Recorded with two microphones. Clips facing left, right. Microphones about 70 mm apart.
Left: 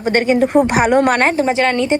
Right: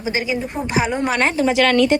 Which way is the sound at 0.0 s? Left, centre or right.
Left.